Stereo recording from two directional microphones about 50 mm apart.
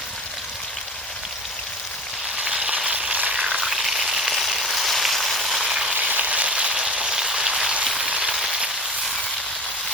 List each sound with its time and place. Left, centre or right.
2.4 s frying: centre
3.6 s frying: centre
5.9 s a sound: right